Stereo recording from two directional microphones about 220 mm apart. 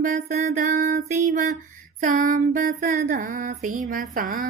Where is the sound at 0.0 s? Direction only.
35° right (ahead or behind).